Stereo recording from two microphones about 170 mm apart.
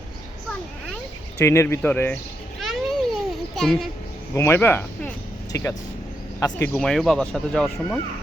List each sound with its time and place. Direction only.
1.4 s speech: 15° left (ahead or behind)
2.6 s a sound: centre (ahead or behind)
3.6 s speech: centre (ahead or behind)
4.4 s a sound: 15° left (ahead or behind)
6.4 s speech: 20° left (ahead or behind)
6.7 s speech: 5° left (ahead or behind)